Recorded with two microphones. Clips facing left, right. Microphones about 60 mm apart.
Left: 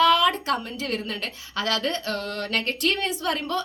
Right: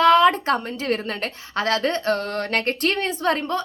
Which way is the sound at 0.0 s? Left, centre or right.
Right.